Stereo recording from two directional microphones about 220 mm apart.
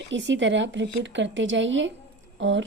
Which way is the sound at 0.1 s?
55° right (ahead or behind).